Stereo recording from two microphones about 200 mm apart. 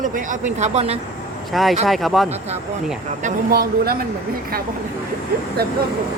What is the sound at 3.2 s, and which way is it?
Speech, 45° right (ahead or behind).